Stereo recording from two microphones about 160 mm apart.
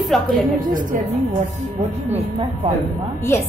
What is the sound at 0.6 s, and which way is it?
Speech, 55° right (ahead or behind).